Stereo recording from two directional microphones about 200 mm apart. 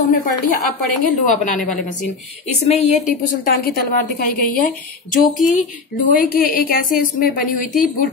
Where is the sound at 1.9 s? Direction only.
35° left (ahead or behind).